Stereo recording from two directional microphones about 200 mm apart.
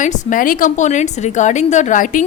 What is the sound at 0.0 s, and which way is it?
A woman's voice, 40° left (ahead or behind).